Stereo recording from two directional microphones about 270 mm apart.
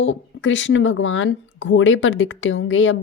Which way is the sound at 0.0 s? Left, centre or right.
Left.